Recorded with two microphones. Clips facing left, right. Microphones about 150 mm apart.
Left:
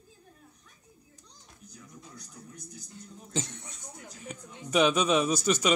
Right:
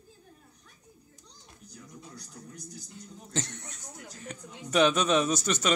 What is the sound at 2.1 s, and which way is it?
Television, 75° right (ahead or behind).